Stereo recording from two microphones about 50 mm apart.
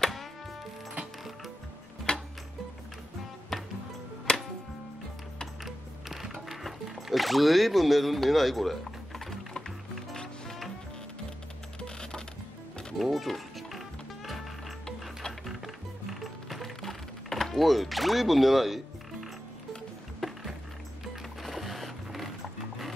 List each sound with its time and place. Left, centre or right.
2.1 s music: centre
4.3 s music: centre
5.6 s music: centre
11.8 s music: centre
12.9 s music: centre
15.4 s music: centre
20.2 s music: centre